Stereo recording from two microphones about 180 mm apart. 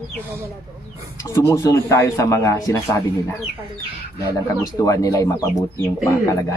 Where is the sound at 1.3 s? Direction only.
15° left (ahead or behind).